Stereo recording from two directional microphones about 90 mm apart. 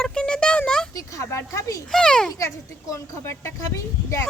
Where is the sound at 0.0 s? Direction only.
10° left (ahead or behind).